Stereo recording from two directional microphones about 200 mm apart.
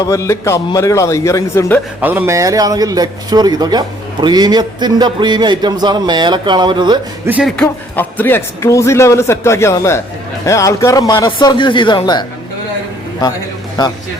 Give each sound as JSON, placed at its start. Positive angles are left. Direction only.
{"t": 0.1, "sound": "a man's voice", "side_deg": 15}
{"t": 2.0, "sound": "a man's voice", "side_deg": -10}
{"t": 7.3, "sound": "speech", "side_deg": -5}
{"t": 7.5, "sound": "a man's voice", "side_deg": 5}